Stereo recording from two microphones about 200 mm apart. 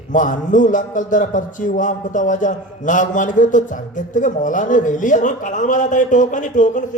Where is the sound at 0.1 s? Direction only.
40° left (ahead or behind).